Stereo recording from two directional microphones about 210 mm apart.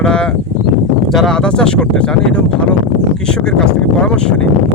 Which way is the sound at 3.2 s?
5° left (ahead or behind).